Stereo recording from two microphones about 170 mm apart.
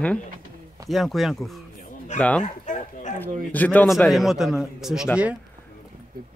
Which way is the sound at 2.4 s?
45° left (ahead or behind).